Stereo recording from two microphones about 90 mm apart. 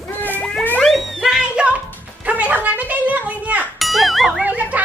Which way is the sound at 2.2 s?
15° right (ahead or behind).